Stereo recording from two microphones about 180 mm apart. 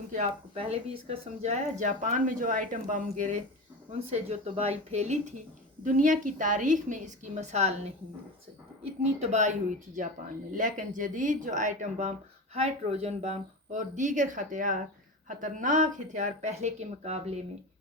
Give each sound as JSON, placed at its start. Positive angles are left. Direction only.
{"t": 0.1, "sound": "speech", "side_deg": -40}
{"t": 8.8, "sound": "speech", "side_deg": -40}